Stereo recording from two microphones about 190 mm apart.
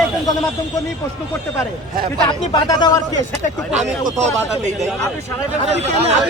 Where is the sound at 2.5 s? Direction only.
20° left (ahead or behind).